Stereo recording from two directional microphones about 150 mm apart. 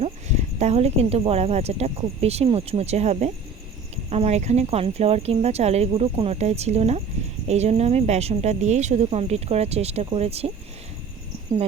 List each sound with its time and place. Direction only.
0.0 s speech: 50° right (ahead or behind)